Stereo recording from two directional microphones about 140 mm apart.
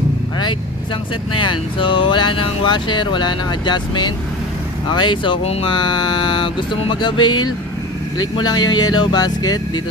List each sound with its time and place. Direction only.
1.4 s speech: 40° left (ahead or behind)
5.7 s speech: 30° left (ahead or behind)